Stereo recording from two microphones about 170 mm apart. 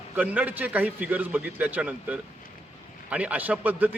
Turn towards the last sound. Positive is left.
turn(degrees=-10)  # may be behind; listen again after turning